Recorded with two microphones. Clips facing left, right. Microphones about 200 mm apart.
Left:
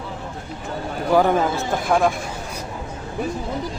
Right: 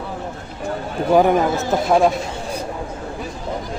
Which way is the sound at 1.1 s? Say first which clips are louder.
Right 3 dB; 15° right (ahead or behind).